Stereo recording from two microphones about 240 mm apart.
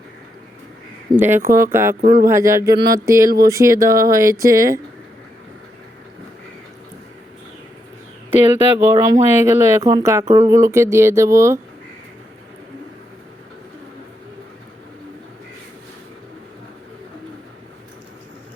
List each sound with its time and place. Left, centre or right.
1.1 s speech: centre
2.0 s speech: right
2.2 s speech: centre
8.8 s speech: centre